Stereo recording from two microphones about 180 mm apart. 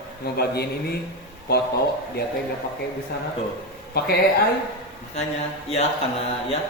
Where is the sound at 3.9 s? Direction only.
60° left (ahead or behind).